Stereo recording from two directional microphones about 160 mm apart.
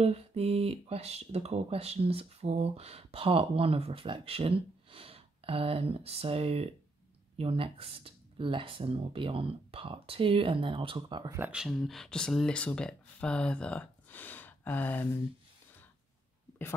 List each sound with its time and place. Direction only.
0.0 s speech: 40° right (ahead or behind)
11.3 s speech: 10° right (ahead or behind); by 15.0 s 10° left (ahead or behind)